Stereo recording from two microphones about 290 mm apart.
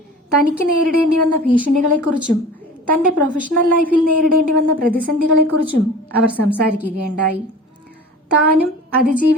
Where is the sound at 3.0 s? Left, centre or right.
Right.